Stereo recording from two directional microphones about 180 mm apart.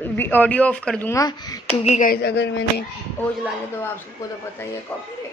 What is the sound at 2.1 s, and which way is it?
Speech, 65° left (ahead or behind).